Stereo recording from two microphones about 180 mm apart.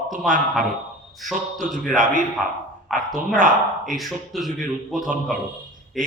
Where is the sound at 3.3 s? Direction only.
45° right (ahead or behind).